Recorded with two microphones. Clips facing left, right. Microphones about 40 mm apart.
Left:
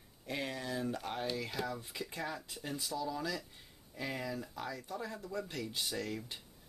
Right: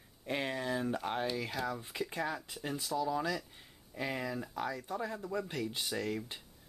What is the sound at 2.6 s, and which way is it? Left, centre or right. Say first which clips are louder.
Speech: right 4 dB; centre.